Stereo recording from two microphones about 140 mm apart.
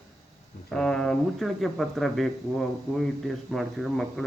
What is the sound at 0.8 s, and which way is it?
Speech, 5° left (ahead or behind).